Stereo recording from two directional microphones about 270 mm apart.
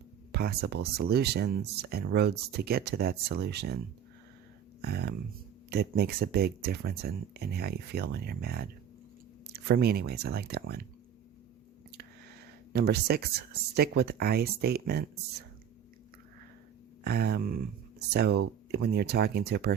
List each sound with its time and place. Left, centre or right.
0.3 s speech: right
4.8 s speech: right
12.7 s speech: right
17.0 s speech: right